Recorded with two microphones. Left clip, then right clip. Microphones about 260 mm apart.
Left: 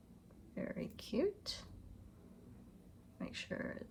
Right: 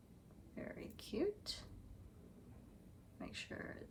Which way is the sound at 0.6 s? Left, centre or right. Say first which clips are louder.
Left 6 dB; left.